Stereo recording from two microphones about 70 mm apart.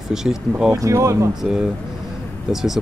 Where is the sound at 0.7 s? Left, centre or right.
Right.